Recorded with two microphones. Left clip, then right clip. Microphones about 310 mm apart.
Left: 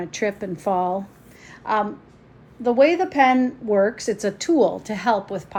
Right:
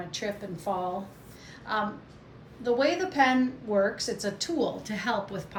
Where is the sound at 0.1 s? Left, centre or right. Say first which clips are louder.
Left 10 dB; centre.